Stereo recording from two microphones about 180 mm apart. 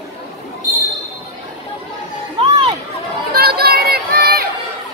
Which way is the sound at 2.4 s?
30° right (ahead or behind).